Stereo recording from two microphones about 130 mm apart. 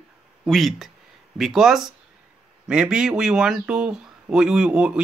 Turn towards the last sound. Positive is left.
turn(degrees=-5)  # may be behind; listen again after turning